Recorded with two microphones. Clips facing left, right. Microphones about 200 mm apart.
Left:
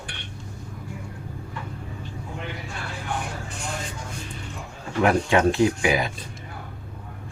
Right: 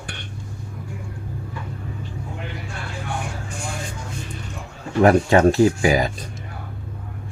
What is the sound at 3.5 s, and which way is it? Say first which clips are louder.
Vehicle: right 2 dB; 10° right (ahead or behind).